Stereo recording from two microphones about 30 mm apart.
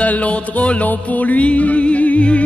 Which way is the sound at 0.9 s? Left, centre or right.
Left.